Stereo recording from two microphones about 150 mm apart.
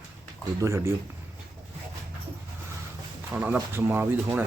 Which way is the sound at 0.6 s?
20° right (ahead or behind).